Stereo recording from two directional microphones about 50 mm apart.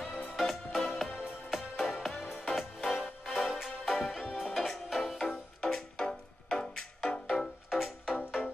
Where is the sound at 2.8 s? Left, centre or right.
Centre.